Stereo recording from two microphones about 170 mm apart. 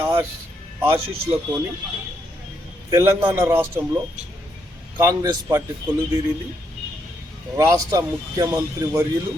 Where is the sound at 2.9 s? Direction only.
15° right (ahead or behind).